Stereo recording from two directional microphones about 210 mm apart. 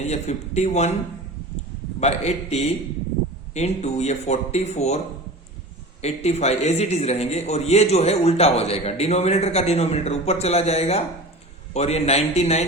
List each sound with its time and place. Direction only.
0.0 s a man's voice: 30° left (ahead or behind)
2.0 s a man's voice: 30° left (ahead or behind)